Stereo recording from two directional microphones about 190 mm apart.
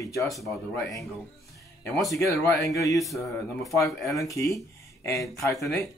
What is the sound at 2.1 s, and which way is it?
Speech, 15° left (ahead or behind).